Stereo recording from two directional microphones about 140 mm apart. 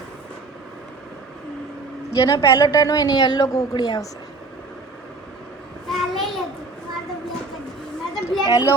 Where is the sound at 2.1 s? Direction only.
25° left (ahead or behind).